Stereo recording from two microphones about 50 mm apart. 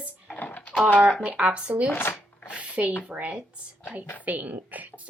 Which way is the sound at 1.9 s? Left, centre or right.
Left.